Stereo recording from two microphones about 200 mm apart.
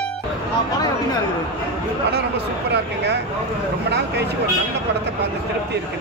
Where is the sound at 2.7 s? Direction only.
55° right (ahead or behind).